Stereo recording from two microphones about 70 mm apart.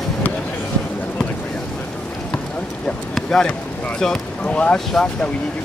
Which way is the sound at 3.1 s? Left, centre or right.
Centre.